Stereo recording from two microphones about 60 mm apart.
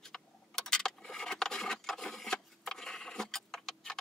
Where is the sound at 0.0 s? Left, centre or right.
Centre.